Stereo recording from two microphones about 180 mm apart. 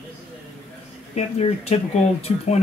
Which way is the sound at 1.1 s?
35° left (ahead or behind).